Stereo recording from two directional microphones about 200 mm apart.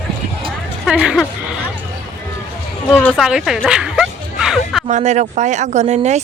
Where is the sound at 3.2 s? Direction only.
Centre (ahead or behind).